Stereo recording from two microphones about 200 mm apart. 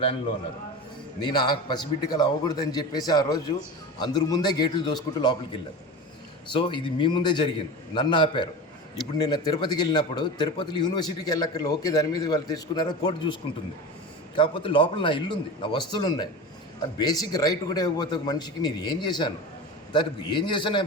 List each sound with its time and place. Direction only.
1.2 s a man's voice: 20° left (ahead or behind)
6.5 s a man's voice: 25° left (ahead or behind)